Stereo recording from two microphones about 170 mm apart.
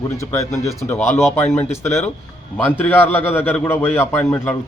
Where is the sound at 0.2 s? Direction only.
15° left (ahead or behind).